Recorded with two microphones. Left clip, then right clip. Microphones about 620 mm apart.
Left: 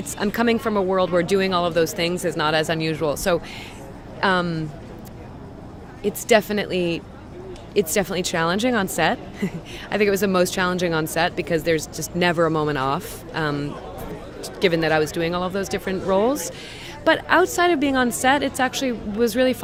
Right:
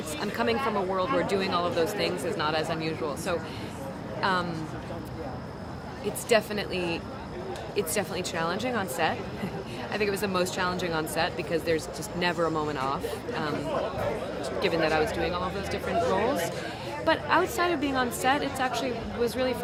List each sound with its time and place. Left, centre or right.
0.2 s speech: left
6.2 s a woman's voice: left
14.6 s a woman's voice: left